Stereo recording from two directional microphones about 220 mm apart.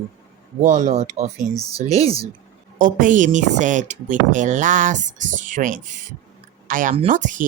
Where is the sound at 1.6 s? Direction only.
15° left (ahead or behind).